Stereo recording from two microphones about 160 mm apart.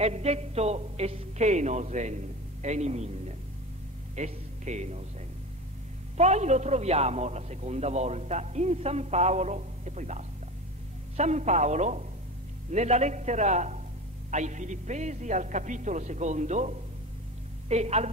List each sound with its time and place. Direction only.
0.0 s a man's voice: 40° right (ahead or behind)
6.1 s a man's voice: 45° right (ahead or behind)